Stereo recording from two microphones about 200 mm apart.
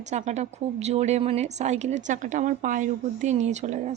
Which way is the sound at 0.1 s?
35° right (ahead or behind).